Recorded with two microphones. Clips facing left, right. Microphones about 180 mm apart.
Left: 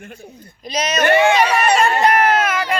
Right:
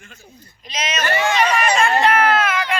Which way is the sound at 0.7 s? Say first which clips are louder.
Left 5 dB; 40° left (ahead or behind).